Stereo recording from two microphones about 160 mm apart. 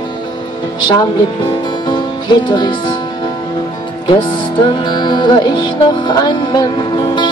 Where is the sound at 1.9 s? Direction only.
30° left (ahead or behind).